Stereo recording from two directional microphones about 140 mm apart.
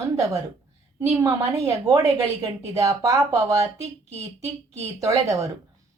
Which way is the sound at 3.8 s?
50° right (ahead or behind).